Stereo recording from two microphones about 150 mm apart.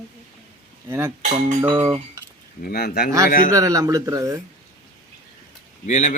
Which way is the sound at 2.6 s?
90° left.